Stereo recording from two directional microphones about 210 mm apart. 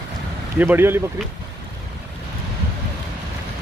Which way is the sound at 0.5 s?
10° right (ahead or behind).